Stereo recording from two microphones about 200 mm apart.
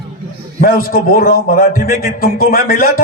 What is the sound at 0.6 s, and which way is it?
A man's voice, 45° left (ahead or behind).